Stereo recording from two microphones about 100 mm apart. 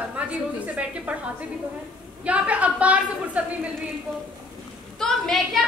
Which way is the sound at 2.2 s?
15° right (ahead or behind).